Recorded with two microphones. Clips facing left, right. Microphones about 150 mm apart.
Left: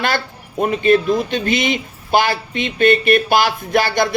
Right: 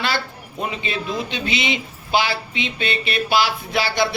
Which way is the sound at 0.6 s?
50° left (ahead or behind).